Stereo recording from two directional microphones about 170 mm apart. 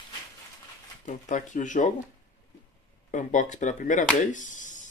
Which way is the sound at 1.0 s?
45° left (ahead or behind).